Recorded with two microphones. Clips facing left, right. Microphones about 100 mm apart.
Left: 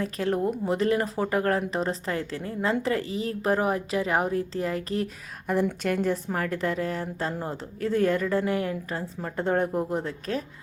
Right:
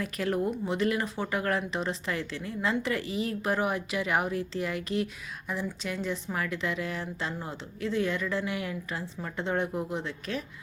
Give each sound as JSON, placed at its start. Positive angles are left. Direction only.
{"t": 0.0, "sound": "speech", "side_deg": 30}
{"t": 5.5, "sound": "a woman's voice", "side_deg": 55}